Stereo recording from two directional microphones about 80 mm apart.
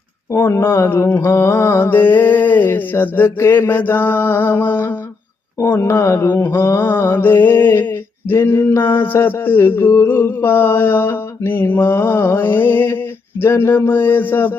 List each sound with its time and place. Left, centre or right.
0.3 s speech: left
1.2 s mantra: left